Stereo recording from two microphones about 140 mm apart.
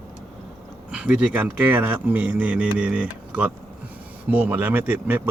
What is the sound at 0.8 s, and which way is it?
Speech, 10° right (ahead or behind).